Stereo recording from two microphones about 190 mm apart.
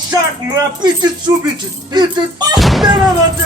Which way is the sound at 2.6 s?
Centre (ahead or behind).